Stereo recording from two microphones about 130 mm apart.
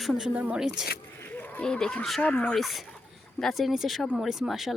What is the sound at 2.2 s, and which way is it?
Speech, 10° left (ahead or behind).